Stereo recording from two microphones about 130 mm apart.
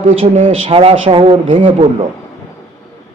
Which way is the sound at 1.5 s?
75° right (ahead or behind).